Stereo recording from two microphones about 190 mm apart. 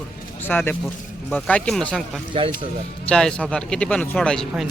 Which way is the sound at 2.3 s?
30° right (ahead or behind).